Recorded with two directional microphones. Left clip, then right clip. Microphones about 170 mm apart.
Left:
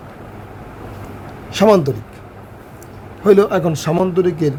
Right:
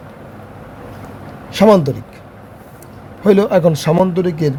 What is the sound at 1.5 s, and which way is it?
Speech, 15° right (ahead or behind).